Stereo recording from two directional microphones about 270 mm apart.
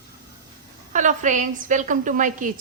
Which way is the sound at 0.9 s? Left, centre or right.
Right.